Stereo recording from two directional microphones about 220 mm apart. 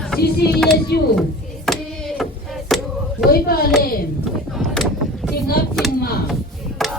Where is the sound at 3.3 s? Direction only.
45° left (ahead or behind).